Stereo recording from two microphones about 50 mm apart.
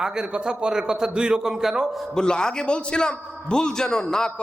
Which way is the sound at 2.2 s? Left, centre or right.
Centre.